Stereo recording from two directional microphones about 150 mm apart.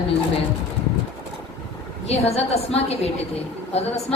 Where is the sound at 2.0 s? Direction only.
45° left (ahead or behind).